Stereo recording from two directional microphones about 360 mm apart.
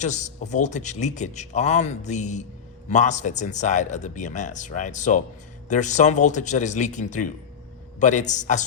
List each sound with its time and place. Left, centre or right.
0.0 s speech: centre